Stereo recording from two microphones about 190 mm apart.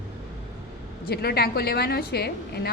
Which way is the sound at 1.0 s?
55° left (ahead or behind).